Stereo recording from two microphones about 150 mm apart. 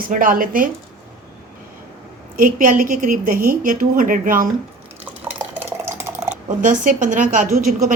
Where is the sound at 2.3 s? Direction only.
60° right (ahead or behind).